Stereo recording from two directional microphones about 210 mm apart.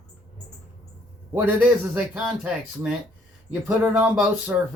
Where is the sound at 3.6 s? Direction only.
5° right (ahead or behind).